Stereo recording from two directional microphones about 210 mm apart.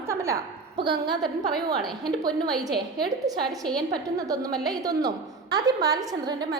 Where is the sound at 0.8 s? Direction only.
20° right (ahead or behind).